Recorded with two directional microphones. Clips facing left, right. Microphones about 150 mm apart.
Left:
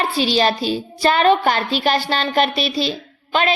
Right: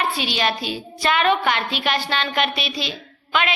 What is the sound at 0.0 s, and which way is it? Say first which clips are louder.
A woman's voice: left 5 dB; 35° left (ahead or behind).